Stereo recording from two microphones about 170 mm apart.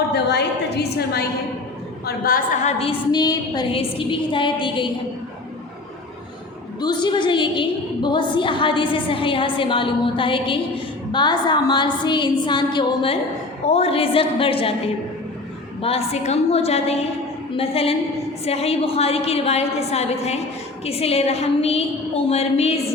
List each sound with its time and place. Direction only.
0.1 s a woman's voice: 75° left (ahead or behind)
2.0 s a woman's voice: 60° left (ahead or behind)
2.7 s a woman's voice: 30° left (ahead or behind)
6.7 s a woman's voice: 25° left (ahead or behind)
15.8 s a woman's voice: 35° left (ahead or behind)